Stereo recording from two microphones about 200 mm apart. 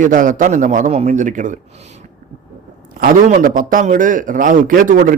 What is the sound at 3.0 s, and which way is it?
A man's voice, 40° right (ahead or behind).